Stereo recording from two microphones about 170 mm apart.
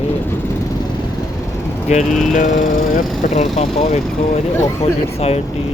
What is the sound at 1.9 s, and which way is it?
Speech, 45° left (ahead or behind).